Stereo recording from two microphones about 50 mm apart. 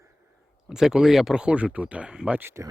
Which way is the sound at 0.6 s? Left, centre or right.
Centre.